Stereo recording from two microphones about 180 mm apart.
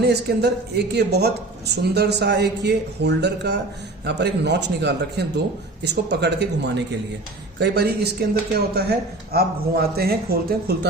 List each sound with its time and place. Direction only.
0.0 s a woman's voice: 65° right (ahead or behind)